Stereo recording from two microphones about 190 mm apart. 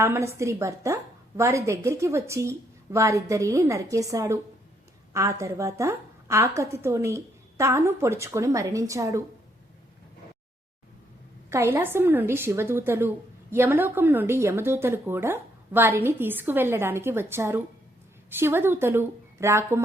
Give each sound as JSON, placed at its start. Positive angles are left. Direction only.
{"t": 0.0, "sound": "a woman's voice", "side_deg": -15}
{"t": 11.4, "sound": "a woman's voice", "side_deg": -15}